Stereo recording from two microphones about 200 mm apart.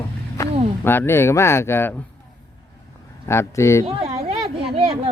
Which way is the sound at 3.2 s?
15° left (ahead or behind).